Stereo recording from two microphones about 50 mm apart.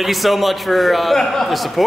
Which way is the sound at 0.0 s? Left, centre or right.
Centre.